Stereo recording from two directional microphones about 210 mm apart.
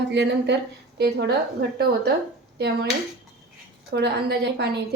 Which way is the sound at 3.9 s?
50° right (ahead or behind).